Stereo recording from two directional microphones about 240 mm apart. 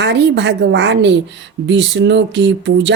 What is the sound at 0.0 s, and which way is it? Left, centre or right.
Speech, right.